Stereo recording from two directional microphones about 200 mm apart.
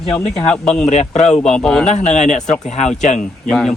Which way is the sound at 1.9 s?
35° left (ahead or behind).